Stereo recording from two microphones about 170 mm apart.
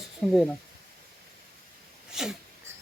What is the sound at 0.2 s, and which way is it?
Speech, centre (ahead or behind).